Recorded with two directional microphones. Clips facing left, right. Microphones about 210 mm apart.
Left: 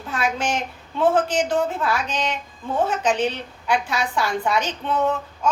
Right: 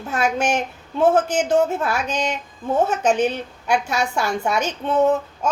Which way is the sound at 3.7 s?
45° right (ahead or behind).